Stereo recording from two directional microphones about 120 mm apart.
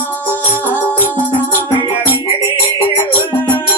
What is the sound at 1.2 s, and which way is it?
Music, 15° left (ahead or behind).